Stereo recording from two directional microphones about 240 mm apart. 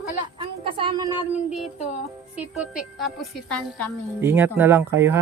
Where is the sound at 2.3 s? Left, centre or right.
Centre.